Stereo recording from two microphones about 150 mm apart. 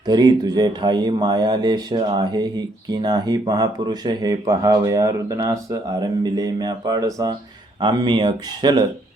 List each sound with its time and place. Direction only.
0.0 s speech: 25° right (ahead or behind)